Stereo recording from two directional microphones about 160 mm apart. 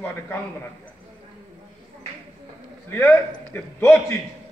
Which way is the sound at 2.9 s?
15° left (ahead or behind).